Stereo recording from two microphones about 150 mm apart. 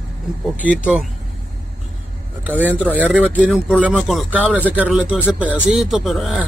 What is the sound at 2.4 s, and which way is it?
Speech, 10° right (ahead or behind).